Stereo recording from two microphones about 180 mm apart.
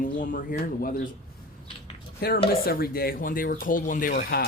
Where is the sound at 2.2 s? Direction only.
60° left (ahead or behind).